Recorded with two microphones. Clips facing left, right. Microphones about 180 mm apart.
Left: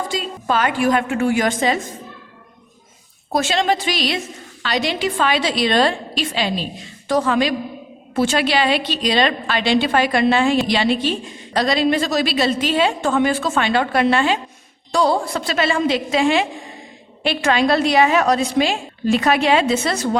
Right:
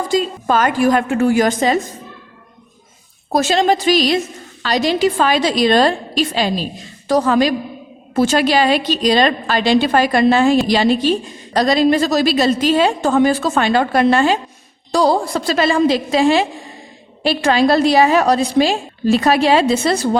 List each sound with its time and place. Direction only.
0.1 s a woman's voice: 45° right (ahead or behind)
3.3 s a woman's voice: 40° right (ahead or behind)